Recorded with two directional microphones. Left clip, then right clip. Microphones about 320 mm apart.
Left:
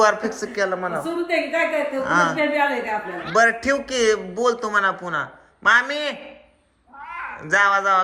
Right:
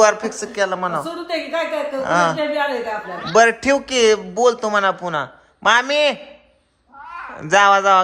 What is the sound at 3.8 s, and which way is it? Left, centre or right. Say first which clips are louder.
A man's voice: right 4 dB; centre.